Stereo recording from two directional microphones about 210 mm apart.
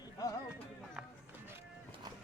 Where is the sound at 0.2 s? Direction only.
15° left (ahead or behind).